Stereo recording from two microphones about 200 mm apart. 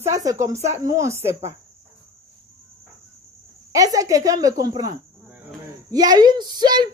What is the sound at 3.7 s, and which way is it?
A woman's voice, 15° right (ahead or behind).